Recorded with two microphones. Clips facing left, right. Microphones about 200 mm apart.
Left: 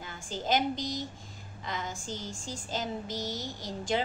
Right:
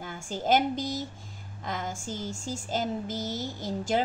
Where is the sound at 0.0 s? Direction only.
50° right (ahead or behind).